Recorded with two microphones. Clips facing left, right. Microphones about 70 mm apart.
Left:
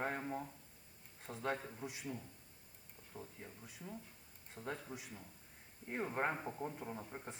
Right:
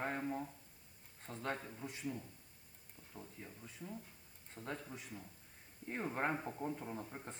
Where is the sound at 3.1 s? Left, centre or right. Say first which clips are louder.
Left 1 dB; centre.